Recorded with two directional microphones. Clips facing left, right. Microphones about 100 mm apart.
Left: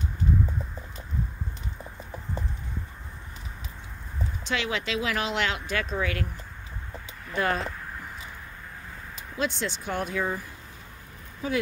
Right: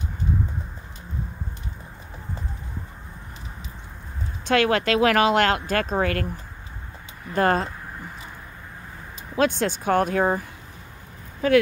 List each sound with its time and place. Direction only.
4.5 s speech: 55° right (ahead or behind)
7.3 s speech: 45° right (ahead or behind)
9.4 s speech: 50° right (ahead or behind)
11.4 s speech: 80° right